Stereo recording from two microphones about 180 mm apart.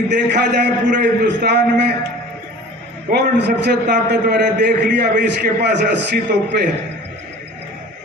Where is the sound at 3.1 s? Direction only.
65° right (ahead or behind).